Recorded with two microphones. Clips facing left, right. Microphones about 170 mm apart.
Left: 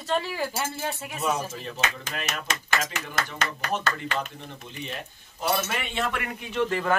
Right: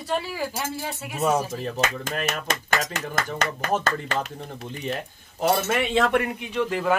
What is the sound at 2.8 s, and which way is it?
A man's voice, 45° right (ahead or behind).